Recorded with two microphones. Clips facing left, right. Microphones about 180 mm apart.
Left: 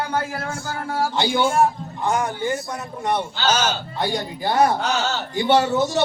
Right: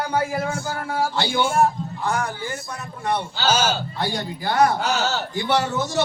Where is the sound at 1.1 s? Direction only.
15° left (ahead or behind).